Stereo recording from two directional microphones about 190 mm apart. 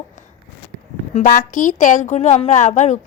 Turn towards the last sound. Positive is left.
turn(degrees=35)  # may be behind; listen again after turning